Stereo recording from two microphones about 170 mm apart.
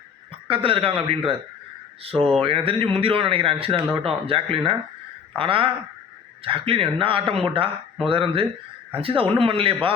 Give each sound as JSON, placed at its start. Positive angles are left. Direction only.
{"t": 0.4, "sound": "a man's voice", "side_deg": -30}